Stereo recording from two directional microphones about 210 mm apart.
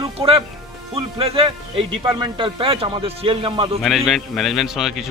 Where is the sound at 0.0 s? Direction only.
25° right (ahead or behind).